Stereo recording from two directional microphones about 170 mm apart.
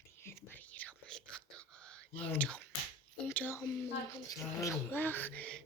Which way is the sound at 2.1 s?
5° left (ahead or behind).